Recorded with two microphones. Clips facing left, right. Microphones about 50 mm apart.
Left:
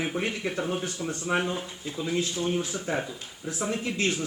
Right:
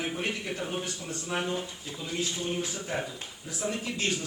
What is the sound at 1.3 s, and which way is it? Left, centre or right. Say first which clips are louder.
Speech: left 5 dB; left.